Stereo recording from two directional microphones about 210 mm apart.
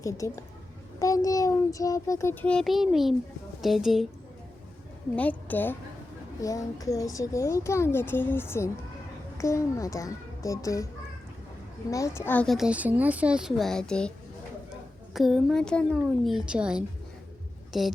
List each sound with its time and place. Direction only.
0.0 s speech: 15° left (ahead or behind); by 4.0 s centre (ahead or behind)
5.1 s speech: 5° left (ahead or behind)
11.9 s speech: 15° left (ahead or behind)
15.1 s speech: centre (ahead or behind)